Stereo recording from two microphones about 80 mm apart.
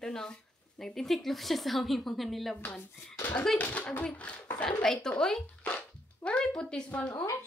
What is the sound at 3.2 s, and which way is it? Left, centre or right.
Speech, left.